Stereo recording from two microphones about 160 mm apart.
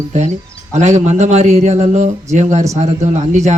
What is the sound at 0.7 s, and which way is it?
A man's voice, 45° right (ahead or behind).